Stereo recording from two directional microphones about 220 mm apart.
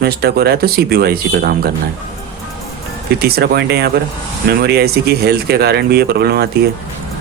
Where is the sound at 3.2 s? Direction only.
45° right (ahead or behind).